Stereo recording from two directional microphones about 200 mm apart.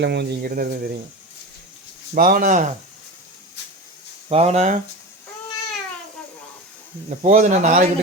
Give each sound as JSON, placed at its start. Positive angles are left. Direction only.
{"t": 0.0, "sound": "speech", "side_deg": -55}
{"t": 2.1, "sound": "speech", "side_deg": -45}
{"t": 4.3, "sound": "speech", "side_deg": -30}
{"t": 7.2, "sound": "speech", "side_deg": -35}